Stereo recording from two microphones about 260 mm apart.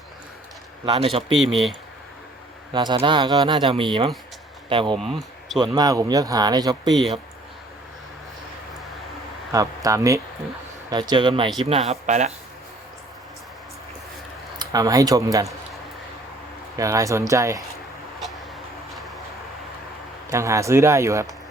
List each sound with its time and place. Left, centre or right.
0.9 s speech: right
2.7 s speech: centre
4.9 s speech: centre
5.5 s speech: centre
9.5 s speech: centre
14.6 s speech: centre
16.7 s speech: centre
18.2 s vehicle: centre
20.3 s speech: centre